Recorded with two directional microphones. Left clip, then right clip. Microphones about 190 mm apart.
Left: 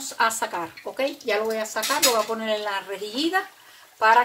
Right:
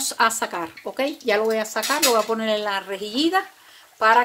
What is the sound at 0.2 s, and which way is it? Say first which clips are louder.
Speech: right 2 dB; 45° right (ahead or behind).